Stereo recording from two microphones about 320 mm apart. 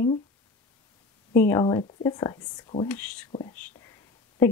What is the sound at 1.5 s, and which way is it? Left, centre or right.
Speech, centre.